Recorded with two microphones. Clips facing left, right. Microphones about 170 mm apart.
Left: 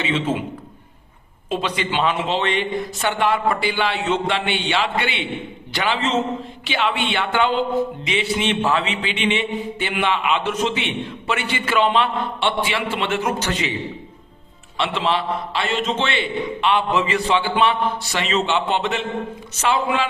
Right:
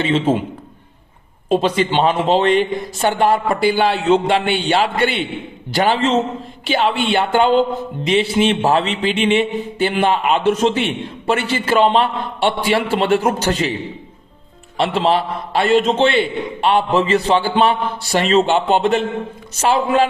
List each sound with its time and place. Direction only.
0.0 s speech: 35° right (ahead or behind)
1.5 s speech: 40° right (ahead or behind)
14.8 s speech: 40° right (ahead or behind)